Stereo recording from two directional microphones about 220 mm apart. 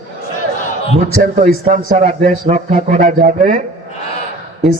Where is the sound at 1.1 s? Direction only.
35° right (ahead or behind).